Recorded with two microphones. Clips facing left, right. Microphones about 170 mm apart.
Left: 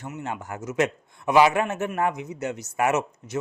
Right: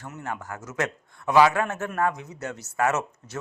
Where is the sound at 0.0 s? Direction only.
20° left (ahead or behind).